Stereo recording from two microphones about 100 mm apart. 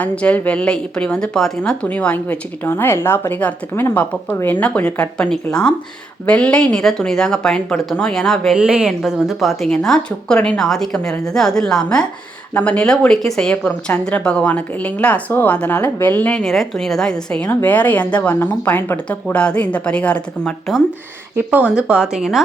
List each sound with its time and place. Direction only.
0.0 s a woman's voice: 15° left (ahead or behind)
8.5 s a woman's voice: 10° right (ahead or behind); by 16.4 s 15° left (ahead or behind)
16.4 s a woman's voice: centre (ahead or behind)
21.3 s speech: 15° right (ahead or behind)